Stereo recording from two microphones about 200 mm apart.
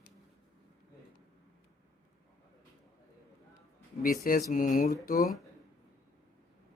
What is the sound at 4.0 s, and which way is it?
Speech, 45° left (ahead or behind).